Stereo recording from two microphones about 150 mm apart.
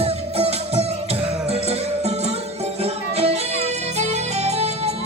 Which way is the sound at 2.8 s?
45° right (ahead or behind).